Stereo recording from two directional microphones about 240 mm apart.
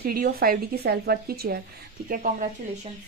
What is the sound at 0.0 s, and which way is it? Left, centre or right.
Speech, right.